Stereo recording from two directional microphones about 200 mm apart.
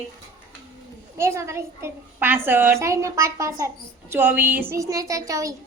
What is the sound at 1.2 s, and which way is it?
A woman's voice, 15° right (ahead or behind).